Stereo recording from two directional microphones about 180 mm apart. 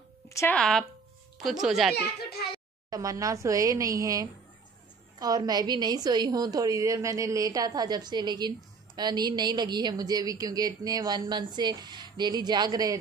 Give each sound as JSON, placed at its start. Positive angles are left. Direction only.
{"t": 0.3, "sound": "a sound", "side_deg": 15}
{"t": 0.6, "sound": "speech", "side_deg": 5}
{"t": 2.9, "sound": "a woman's voice", "side_deg": -20}